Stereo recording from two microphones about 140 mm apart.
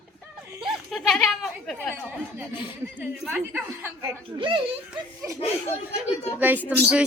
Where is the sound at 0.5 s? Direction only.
Centre (ahead or behind).